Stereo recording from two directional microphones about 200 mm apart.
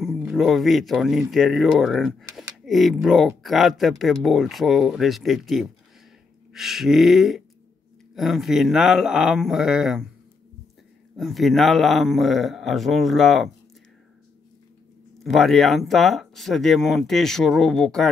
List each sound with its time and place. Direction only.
0.0 s speech: centre (ahead or behind)
11.1 s speech: centre (ahead or behind)
15.2 s speech: centre (ahead or behind)